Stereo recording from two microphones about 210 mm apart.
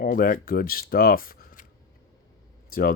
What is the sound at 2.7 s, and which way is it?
Speech, 45° left (ahead or behind).